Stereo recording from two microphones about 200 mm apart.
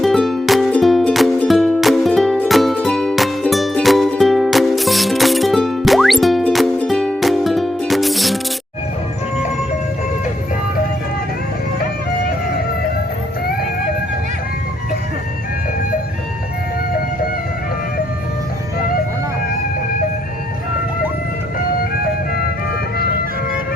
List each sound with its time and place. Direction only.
0.0 s music: centre (ahead or behind)
21.8 s music: 45° left (ahead or behind)